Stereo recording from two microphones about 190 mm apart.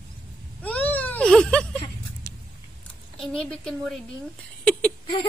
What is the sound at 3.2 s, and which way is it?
Speech, centre (ahead or behind).